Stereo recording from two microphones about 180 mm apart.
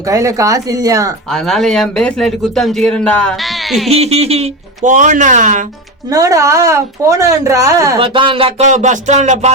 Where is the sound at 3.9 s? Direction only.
35° right (ahead or behind).